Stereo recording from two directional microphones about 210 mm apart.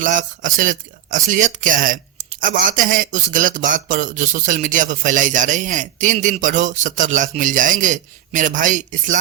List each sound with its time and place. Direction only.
0.0 s a man's voice: 40° right (ahead or behind)